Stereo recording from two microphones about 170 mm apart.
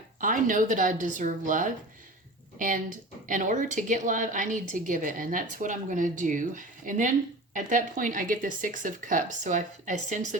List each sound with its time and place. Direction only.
0.2 s a woman's voice: 50° right (ahead or behind)